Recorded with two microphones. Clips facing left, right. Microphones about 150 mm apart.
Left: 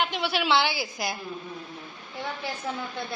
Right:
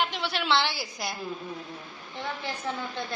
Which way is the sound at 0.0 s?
Centre (ahead or behind).